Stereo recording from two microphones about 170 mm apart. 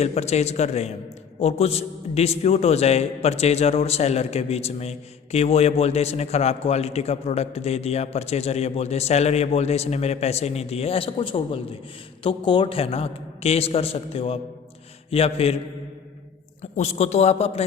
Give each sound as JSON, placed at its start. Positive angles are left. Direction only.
{"t": 0.0, "sound": "a man's voice", "side_deg": 40}
{"t": 16.7, "sound": "a man's voice", "side_deg": 40}